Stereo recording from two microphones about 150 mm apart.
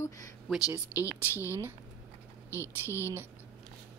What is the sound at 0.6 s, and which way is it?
A woman's voice, 20° left (ahead or behind).